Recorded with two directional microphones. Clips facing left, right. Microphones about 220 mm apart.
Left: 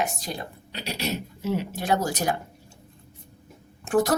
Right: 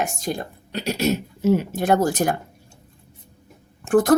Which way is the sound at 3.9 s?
50° right (ahead or behind).